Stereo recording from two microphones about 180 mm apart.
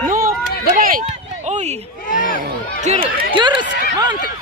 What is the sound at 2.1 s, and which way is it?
Speech, 45° right (ahead or behind).